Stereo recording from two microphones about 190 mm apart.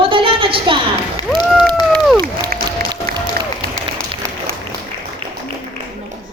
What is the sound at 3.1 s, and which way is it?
Applause, 55° right (ahead or behind).